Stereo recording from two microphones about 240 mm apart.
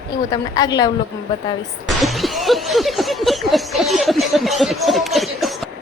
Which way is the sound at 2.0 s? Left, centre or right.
Centre.